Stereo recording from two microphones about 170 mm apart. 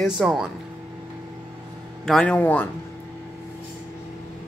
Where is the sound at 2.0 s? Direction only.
5° left (ahead or behind).